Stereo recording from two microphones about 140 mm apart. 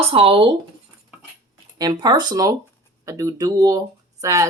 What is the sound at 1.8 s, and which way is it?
Speech, 30° right (ahead or behind).